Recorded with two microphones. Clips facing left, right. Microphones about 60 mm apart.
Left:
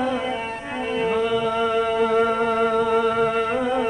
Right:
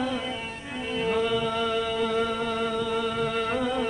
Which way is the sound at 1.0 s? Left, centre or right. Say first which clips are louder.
Left 3 dB; left.